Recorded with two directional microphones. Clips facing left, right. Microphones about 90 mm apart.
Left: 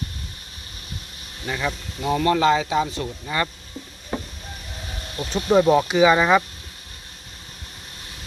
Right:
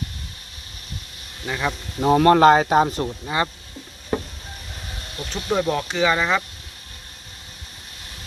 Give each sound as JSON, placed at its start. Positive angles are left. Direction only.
{"t": 1.5, "sound": "speech", "side_deg": -5}
{"t": 2.0, "sound": "speech", "side_deg": -45}
{"t": 3.2, "sound": "speech", "side_deg": -20}
{"t": 5.3, "sound": "speech", "side_deg": 10}